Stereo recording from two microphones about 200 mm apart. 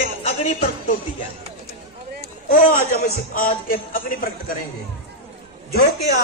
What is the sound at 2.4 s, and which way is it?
A man's voice, 45° left (ahead or behind).